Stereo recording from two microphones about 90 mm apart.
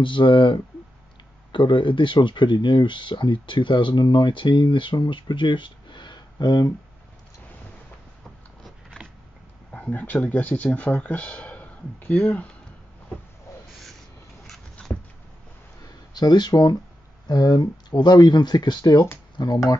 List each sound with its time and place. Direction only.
0.0 s speech: 65° left (ahead or behind)
9.0 s power windows: 10° left (ahead or behind)
9.7 s speech: 20° left (ahead or behind)
14.5 s a sound: 5° left (ahead or behind)
16.1 s speech: 50° left (ahead or behind)